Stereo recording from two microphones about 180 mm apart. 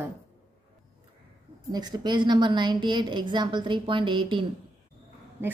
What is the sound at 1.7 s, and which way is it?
A woman's voice, 20° right (ahead or behind).